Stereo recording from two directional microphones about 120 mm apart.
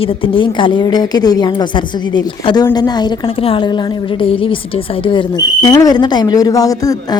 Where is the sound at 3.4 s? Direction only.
50° left (ahead or behind).